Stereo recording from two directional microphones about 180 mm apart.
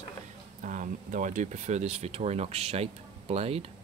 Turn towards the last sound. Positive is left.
turn(degrees=-35)  # may be behind; listen again after turning